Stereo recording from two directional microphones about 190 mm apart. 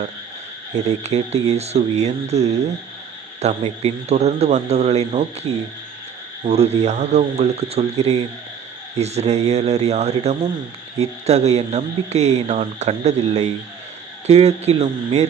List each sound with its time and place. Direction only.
0.9 s speech: 35° right (ahead or behind)